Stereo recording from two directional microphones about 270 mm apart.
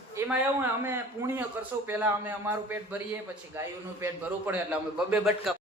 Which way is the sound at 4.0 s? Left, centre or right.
Centre.